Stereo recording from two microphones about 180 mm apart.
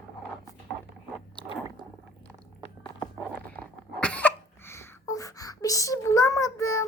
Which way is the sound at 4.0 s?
5° left (ahead or behind).